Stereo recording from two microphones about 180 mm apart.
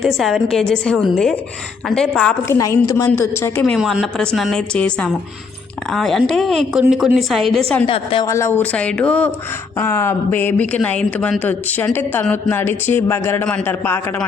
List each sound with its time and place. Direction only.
0.0 s a woman's voice: centre (ahead or behind)
2.5 s speech: 15° left (ahead or behind)
3.8 s a woman's voice: centre (ahead or behind)
7.9 s a woman's voice: 30° left (ahead or behind)
8.3 s speech: 15° left (ahead or behind)